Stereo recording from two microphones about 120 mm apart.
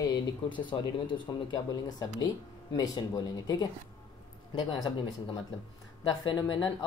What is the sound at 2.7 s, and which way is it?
Speech, 30° left (ahead or behind).